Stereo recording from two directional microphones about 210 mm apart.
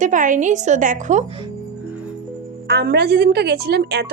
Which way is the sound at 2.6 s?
50° right (ahead or behind).